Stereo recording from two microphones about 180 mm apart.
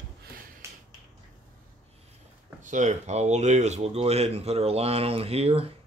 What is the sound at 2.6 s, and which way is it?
Speech, 45° right (ahead or behind).